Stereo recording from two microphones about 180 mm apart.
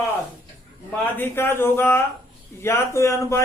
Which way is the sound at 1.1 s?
10° left (ahead or behind).